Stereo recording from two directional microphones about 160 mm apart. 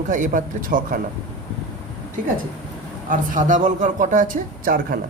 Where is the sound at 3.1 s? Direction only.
55° right (ahead or behind).